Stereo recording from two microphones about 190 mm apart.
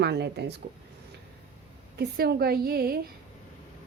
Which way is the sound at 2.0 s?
55° right (ahead or behind).